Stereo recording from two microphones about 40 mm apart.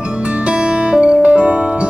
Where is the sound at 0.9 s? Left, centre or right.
Right.